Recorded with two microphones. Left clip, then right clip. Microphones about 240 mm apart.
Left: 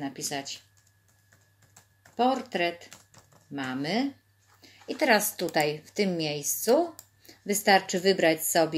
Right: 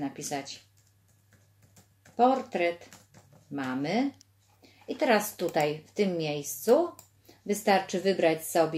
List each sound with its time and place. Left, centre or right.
0.0 s a woman's voice: left
2.1 s a woman's voice: left